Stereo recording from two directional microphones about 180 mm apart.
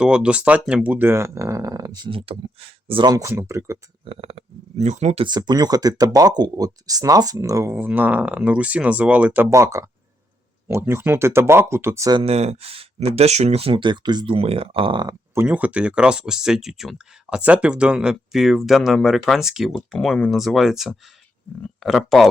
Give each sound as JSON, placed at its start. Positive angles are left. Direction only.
{"t": 0.0, "sound": "speech", "side_deg": -5}
{"t": 4.0, "sound": "speech", "side_deg": -30}
{"t": 12.2, "sound": "speech", "side_deg": -35}
{"t": 15.4, "sound": "speech", "side_deg": -10}